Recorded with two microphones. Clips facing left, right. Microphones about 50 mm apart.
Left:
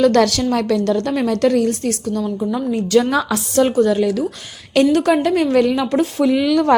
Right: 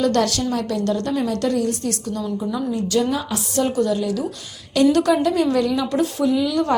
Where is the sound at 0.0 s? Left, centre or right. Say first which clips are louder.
Left 5 dB; left.